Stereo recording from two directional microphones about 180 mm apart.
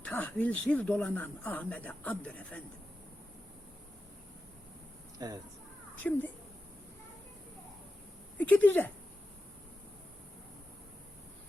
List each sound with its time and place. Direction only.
0.0 s speech: 10° left (ahead or behind)
5.2 s speech: 20° right (ahead or behind)
6.0 s speech: 10° left (ahead or behind)
8.4 s speech: 10° left (ahead or behind)